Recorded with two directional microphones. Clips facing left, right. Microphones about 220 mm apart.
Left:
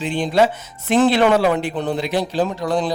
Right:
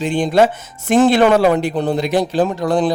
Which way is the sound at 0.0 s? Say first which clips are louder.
Right 3 dB; 45° right (ahead or behind).